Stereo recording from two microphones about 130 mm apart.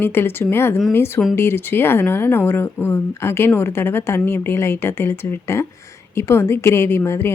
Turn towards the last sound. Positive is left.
turn(degrees=20)  # may be behind; listen again after turning